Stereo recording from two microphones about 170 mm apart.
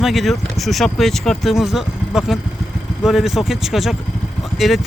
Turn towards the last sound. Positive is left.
turn(degrees=0)  # may be behind; listen again after turning